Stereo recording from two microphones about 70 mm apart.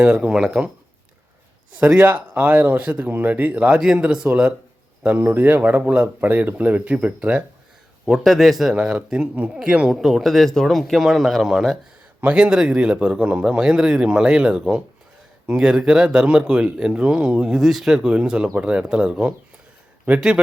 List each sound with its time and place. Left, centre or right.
0.0 s speech: centre
2.0 s speech: right
3.8 s speech: centre
5.0 s speech: right
8.1 s speech: centre
8.7 s speech: centre